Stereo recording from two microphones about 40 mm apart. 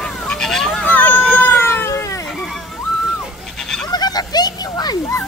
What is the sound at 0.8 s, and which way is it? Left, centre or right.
Hubbub, left.